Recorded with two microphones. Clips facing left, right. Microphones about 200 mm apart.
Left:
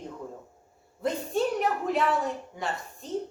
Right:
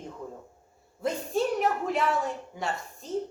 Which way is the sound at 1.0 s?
Centre (ahead or behind).